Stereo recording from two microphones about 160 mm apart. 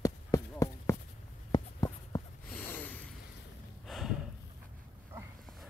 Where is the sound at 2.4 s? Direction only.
10° left (ahead or behind).